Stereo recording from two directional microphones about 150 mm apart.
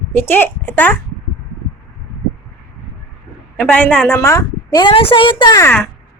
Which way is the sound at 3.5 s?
10° left (ahead or behind).